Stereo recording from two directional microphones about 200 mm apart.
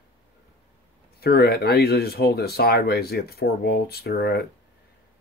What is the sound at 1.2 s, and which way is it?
Speech, 50° left (ahead or behind).